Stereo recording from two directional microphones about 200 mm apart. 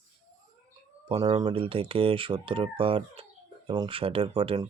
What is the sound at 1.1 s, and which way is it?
Speech, 30° right (ahead or behind).